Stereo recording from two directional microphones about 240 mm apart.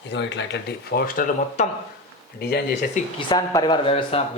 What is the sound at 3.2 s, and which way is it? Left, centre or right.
Speech, centre.